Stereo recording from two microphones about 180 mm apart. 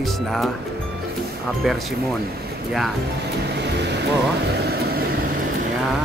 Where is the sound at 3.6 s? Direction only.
70° right (ahead or behind).